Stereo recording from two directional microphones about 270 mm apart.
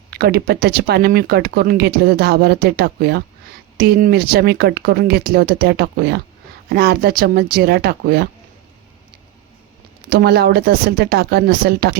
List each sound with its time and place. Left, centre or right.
0.1 s speech: right
10.1 s speech: right